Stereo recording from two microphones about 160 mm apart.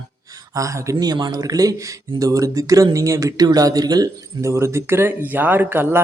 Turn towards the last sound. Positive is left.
turn(degrees=-10)  # may be behind; listen again after turning